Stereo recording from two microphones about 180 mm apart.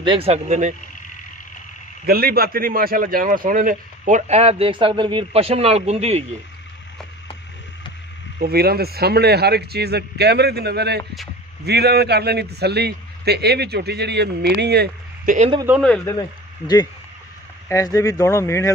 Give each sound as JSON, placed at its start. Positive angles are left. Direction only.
{"t": 0.0, "sound": "speech", "side_deg": -30}
{"t": 2.0, "sound": "speech", "side_deg": -55}
{"t": 8.4, "sound": "a man's voice", "side_deg": -60}
{"t": 16.1, "sound": "speech", "side_deg": 20}